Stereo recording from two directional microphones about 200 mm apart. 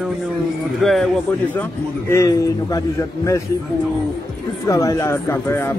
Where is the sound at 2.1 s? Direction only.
15° left (ahead or behind).